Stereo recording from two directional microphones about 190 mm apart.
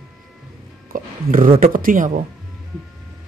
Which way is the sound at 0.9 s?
45° right (ahead or behind).